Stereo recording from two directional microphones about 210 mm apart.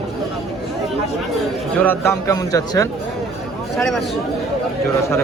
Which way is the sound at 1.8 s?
10° left (ahead or behind).